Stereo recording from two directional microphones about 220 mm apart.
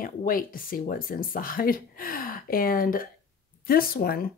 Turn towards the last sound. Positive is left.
turn(degrees=40)  # may be behind; listen again after turning